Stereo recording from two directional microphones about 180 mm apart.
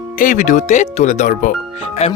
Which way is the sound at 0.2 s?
45° left (ahead or behind).